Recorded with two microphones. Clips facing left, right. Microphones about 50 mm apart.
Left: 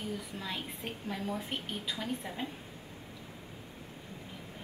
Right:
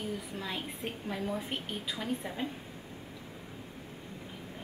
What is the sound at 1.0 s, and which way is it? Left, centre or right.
A woman's voice, centre.